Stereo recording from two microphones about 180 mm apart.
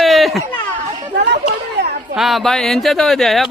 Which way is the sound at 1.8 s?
70° right (ahead or behind).